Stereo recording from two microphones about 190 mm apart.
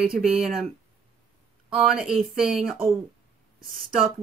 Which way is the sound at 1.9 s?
Centre (ahead or behind).